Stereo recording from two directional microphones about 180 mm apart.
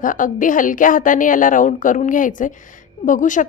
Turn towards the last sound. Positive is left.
turn(degrees=45)  # may be behind; listen again after turning